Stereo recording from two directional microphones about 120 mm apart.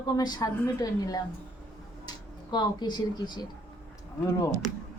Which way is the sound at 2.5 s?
35° left (ahead or behind).